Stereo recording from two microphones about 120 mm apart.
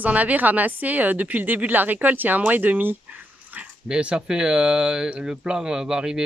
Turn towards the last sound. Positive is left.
turn(degrees=-5)  # may be behind; listen again after turning